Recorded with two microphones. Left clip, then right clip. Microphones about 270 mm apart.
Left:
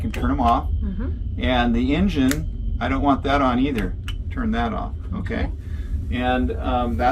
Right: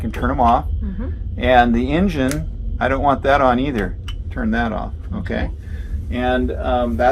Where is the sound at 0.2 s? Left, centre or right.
Right.